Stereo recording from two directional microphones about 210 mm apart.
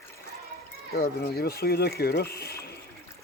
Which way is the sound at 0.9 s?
45° left (ahead or behind).